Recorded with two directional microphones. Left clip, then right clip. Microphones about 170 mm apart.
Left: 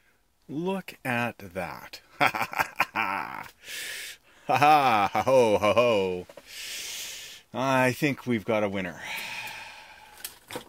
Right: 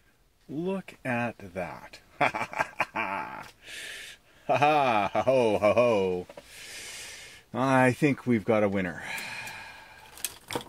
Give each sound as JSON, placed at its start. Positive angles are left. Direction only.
{"t": 0.7, "sound": "speech", "side_deg": 50}
{"t": 5.9, "sound": "speech", "side_deg": 25}
{"t": 6.8, "sound": "a sound", "side_deg": -5}